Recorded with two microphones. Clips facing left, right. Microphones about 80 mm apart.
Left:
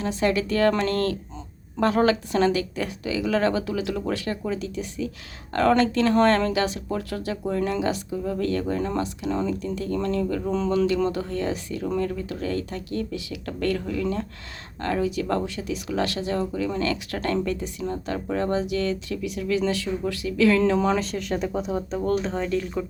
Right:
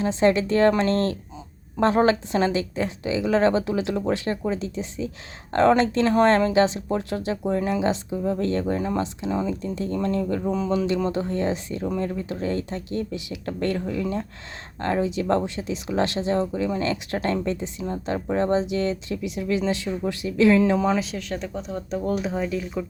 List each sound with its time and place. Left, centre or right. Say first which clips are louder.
0.0 s a woman's voice: right 4 dB; right
10.4 s a man's voice: left 1 dB; centre
20.7 s speech: even; centre